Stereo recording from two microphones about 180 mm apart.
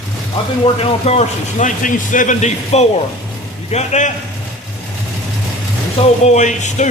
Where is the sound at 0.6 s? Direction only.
35° left (ahead or behind).